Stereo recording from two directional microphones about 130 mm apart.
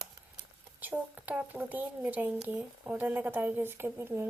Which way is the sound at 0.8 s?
15° right (ahead or behind).